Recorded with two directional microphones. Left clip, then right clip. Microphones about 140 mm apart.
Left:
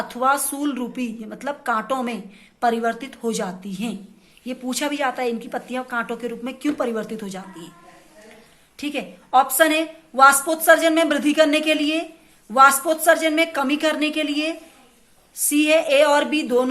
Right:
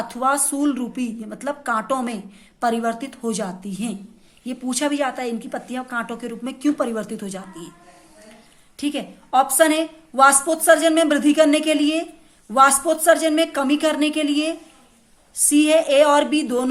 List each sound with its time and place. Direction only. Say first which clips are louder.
0.0 s a woman's voice: left 1 dB; 30° right (ahead or behind)
8.8 s a woman's voice: right 2 dB; 35° right (ahead or behind)